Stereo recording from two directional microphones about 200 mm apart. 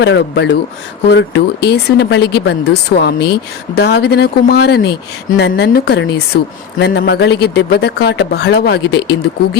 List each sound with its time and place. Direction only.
0.0 s speech: 60° left (ahead or behind)